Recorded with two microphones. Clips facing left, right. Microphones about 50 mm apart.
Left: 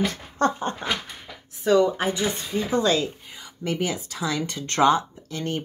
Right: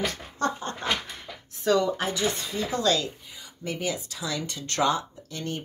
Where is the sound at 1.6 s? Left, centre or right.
Centre.